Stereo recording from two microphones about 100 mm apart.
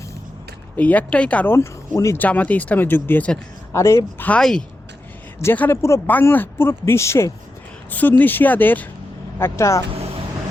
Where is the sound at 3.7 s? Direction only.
30° left (ahead or behind).